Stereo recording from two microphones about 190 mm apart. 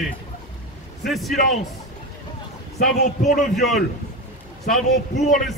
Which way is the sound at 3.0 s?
40° left (ahead or behind).